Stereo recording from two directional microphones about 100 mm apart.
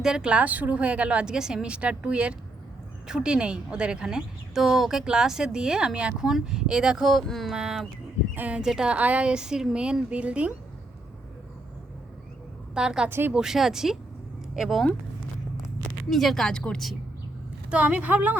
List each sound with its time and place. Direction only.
0.0 s a woman's voice: 5° right (ahead or behind)
12.7 s a woman's voice: 5° right (ahead or behind)
13.1 s speech: 20° right (ahead or behind)
13.3 s a woman's voice: 5° right (ahead or behind)
15.5 s a sound: 35° left (ahead or behind)
16.0 s a woman's voice: 5° left (ahead or behind)
17.7 s a woman's voice: 15° right (ahead or behind)